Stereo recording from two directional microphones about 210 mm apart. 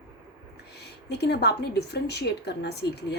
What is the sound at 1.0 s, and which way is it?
A woman's voice, 55° left (ahead or behind).